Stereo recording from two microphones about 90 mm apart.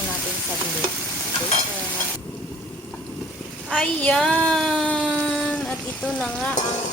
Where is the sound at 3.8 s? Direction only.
15° left (ahead or behind).